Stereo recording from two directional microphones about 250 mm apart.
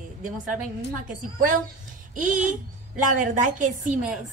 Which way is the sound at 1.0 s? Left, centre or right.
Right.